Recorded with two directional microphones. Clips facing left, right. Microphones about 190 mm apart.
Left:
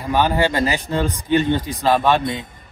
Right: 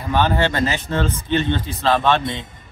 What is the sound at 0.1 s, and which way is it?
A man's voice, 10° left (ahead or behind).